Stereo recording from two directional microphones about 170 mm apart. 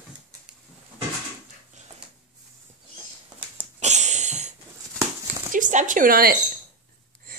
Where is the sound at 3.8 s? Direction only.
45° right (ahead or behind).